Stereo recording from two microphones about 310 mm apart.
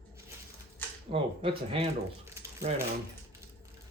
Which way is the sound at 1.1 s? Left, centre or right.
Centre.